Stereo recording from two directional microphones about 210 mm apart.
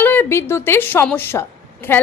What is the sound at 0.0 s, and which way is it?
A woman's voice, 10° left (ahead or behind).